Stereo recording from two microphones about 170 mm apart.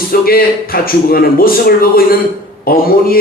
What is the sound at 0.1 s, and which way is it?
A man's voice, 60° left (ahead or behind).